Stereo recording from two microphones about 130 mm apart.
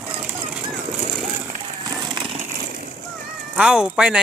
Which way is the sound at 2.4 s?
90° right.